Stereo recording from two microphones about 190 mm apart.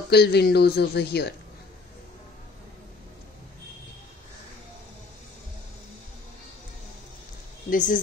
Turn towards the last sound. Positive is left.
turn(degrees=40)  # may be behind; listen again after turning